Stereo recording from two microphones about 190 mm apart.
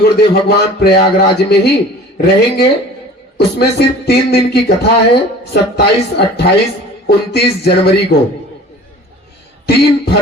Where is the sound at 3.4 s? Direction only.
60° left (ahead or behind).